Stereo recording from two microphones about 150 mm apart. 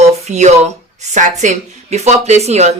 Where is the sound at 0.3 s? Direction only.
50° right (ahead or behind).